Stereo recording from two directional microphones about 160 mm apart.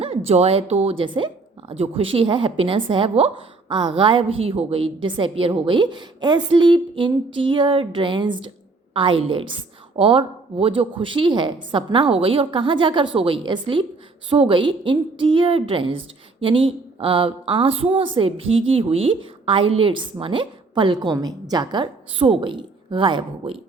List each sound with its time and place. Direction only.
0.3 s a woman's voice: 40° right (ahead or behind)